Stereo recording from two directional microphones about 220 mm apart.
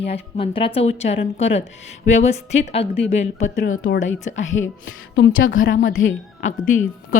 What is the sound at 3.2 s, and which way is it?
Speech, 60° left (ahead or behind).